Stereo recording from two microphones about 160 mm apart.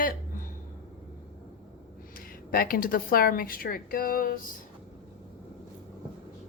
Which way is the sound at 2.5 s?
65° left (ahead or behind).